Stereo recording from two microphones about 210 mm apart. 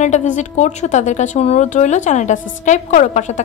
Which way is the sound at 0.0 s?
35° left (ahead or behind).